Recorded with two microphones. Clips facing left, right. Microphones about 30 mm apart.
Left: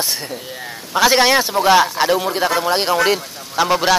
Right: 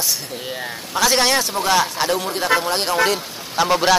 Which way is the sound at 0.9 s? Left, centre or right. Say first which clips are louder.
Left 4 dB; centre.